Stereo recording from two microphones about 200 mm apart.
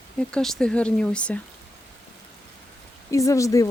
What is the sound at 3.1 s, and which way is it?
Speech, 15° left (ahead or behind).